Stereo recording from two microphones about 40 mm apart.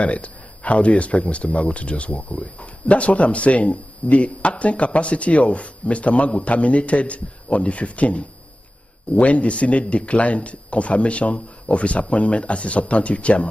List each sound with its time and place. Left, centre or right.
0.0 s speech: left